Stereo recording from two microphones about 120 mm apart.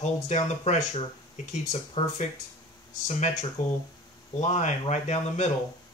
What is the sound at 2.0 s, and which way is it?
Speech, 55° left (ahead or behind).